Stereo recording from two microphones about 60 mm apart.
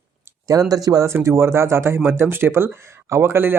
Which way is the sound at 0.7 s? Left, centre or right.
Right.